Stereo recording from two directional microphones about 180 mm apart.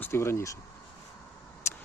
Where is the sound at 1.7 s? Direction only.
15° left (ahead or behind).